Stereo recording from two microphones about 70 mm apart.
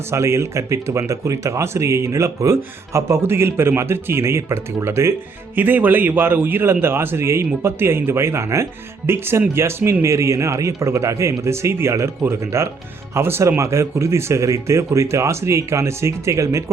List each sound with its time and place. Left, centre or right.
0.1 s speech: right
5.5 s a man's voice: right